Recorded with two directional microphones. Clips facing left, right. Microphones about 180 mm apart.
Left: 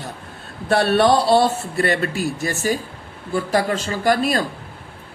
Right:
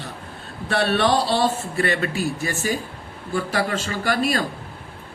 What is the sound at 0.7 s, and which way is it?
A man's voice, 45° left (ahead or behind).